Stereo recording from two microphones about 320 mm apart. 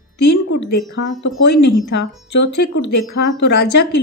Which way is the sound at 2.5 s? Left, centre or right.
Left.